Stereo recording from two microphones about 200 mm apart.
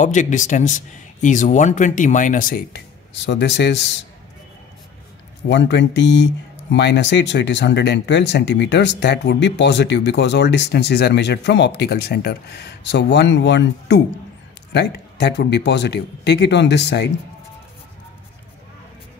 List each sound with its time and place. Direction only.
0.0 s speech: 40° left (ahead or behind); by 4.0 s 60° left (ahead or behind)
5.5 s speech: 60° left (ahead or behind)